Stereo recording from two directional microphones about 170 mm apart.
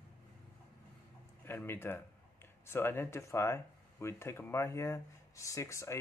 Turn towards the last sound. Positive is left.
turn(degrees=15)  # may be behind; listen again after turning